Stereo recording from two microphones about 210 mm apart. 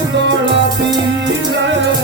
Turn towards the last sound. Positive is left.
turn(degrees=-60)  # may be behind; listen again after turning